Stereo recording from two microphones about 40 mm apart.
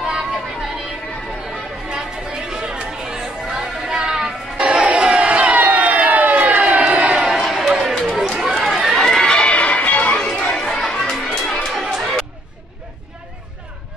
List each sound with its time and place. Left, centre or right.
0.0 s music: centre
1.9 s chatter: centre
4.6 s crowd: right
7.3 s a sound: centre
8.0 s chatter: centre
9.0 s chatter: centre
9.3 s a sound: left
10.5 s children playing: centre
11.3 s chatter: centre